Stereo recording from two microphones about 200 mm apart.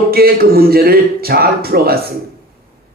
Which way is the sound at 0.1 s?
50° right (ahead or behind).